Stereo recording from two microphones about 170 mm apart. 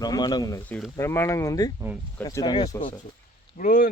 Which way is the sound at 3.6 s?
55° left (ahead or behind).